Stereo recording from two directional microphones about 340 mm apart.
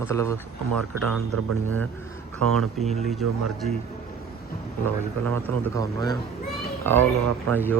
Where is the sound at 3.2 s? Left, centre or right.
Right.